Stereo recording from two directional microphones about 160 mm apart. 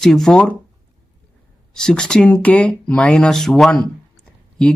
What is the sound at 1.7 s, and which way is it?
Speech, 5° left (ahead or behind).